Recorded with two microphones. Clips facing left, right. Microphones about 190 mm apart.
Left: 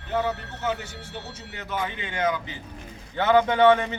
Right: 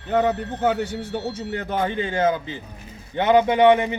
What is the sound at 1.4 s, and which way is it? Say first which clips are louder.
Speech: right 4 dB; 55° right (ahead or behind).